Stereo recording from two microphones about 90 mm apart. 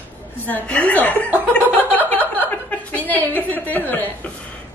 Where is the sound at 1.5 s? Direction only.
15° left (ahead or behind).